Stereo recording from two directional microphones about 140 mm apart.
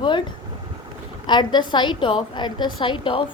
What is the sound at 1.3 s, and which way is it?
A woman's voice, 35° left (ahead or behind).